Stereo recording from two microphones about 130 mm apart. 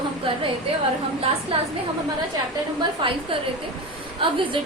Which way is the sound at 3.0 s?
40° right (ahead or behind).